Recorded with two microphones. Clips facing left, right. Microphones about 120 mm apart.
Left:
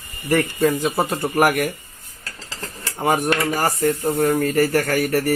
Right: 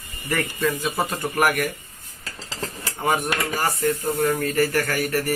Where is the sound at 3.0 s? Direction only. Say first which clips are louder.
Left 4 dB; 40° left (ahead or behind).